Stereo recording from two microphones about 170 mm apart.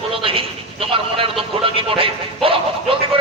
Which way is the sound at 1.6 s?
30° right (ahead or behind).